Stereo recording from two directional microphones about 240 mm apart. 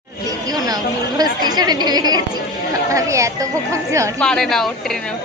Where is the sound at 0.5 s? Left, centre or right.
Centre.